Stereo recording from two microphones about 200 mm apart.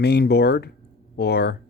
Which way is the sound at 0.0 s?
55° left (ahead or behind).